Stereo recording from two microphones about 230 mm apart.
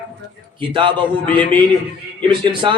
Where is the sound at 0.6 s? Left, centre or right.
Right.